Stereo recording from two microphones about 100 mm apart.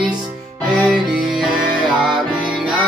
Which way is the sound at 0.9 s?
5° right (ahead or behind).